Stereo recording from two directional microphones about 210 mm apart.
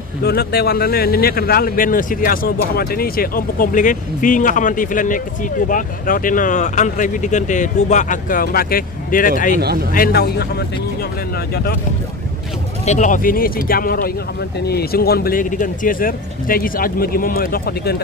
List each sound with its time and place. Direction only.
0.2 s speech: 50° left (ahead or behind)
9.6 s speech: 50° right (ahead or behind)
9.9 s speech: 45° left (ahead or behind)
12.8 s speech: 35° left (ahead or behind)